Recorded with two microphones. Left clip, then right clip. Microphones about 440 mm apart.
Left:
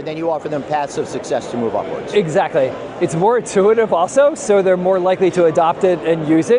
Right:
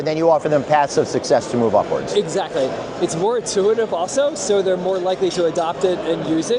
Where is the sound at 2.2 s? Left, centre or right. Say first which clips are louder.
Left 5 dB; left.